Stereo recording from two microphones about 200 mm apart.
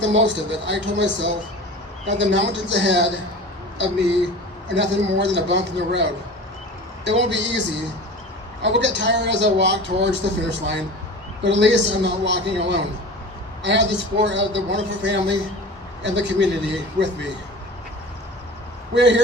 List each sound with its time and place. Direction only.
0.0 s speech: 65° right (ahead or behind)
8.6 s speech: 65° right (ahead or behind)
18.9 s speech: 60° right (ahead or behind)